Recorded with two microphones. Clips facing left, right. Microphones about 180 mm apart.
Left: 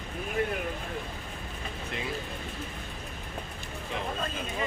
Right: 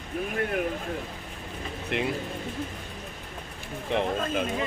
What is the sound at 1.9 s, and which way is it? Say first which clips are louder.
Speech: right 9 dB; 65° right (ahead or behind).